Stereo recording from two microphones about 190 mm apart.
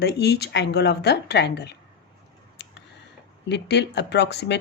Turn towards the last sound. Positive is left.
turn(degrees=65)  # may be behind; listen again after turning